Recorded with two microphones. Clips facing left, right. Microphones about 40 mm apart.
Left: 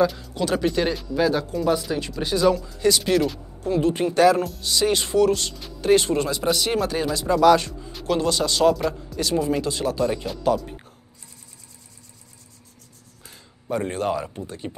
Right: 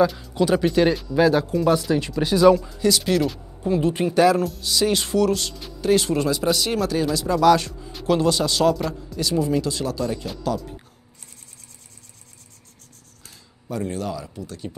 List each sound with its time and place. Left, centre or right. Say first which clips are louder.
0.0 s speech: right 2 dB; centre
5.8 s speech: left 1 dB; centre
13.2 s speech: left 2 dB; left